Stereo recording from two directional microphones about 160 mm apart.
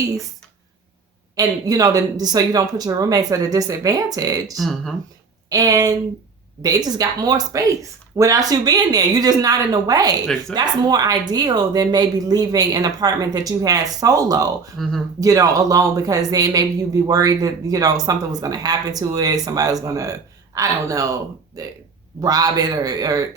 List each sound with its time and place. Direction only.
1.4 s speech: 20° right (ahead or behind)
4.5 s speech: centre (ahead or behind)
5.5 s speech: 20° right (ahead or behind)
14.8 s speech: centre (ahead or behind)
15.2 s speech: 20° right (ahead or behind)